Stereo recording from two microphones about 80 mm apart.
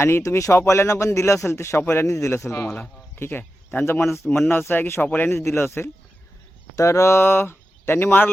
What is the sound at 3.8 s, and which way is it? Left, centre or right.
Speech, left.